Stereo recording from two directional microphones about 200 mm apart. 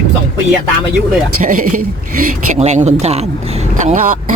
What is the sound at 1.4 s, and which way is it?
Speech, 45° right (ahead or behind).